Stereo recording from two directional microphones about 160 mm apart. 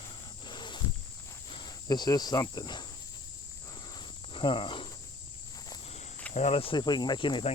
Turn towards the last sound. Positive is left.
turn(degrees=30)  # may be behind; listen again after turning